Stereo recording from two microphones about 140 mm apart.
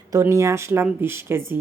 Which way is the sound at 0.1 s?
20° right (ahead or behind).